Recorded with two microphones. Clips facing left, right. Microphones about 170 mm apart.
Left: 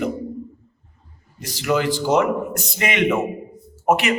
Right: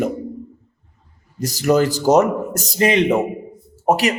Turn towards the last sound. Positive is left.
turn(degrees=-35)  # may be behind; listen again after turning